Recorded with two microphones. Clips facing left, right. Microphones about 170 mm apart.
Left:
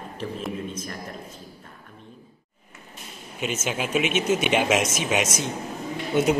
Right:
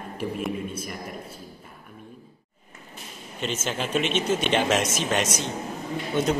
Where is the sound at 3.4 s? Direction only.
10° left (ahead or behind).